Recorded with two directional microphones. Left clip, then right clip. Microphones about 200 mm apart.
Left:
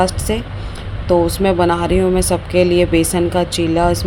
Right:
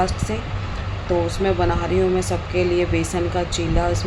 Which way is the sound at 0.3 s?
50° left (ahead or behind).